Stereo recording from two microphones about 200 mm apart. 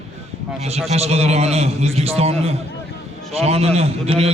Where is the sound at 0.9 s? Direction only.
30° right (ahead or behind).